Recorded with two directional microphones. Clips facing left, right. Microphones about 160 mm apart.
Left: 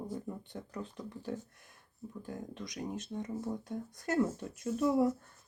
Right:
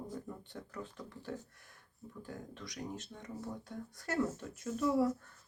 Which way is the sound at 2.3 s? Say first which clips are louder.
Left 4 dB; 20° left (ahead or behind).